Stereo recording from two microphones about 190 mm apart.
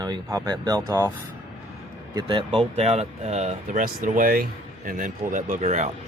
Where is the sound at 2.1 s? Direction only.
25° right (ahead or behind).